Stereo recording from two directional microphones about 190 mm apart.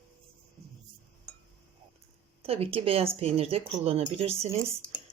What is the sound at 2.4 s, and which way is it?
Speech, 30° right (ahead or behind).